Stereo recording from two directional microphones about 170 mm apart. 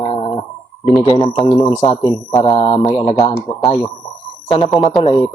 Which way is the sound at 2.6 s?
30° left (ahead or behind).